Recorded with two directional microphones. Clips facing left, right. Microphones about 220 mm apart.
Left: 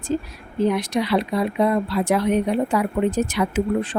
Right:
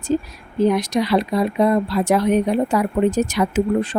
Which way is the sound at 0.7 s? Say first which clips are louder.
Right 3 dB; 40° right (ahead or behind).